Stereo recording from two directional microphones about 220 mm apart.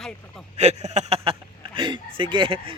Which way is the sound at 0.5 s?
30° right (ahead or behind).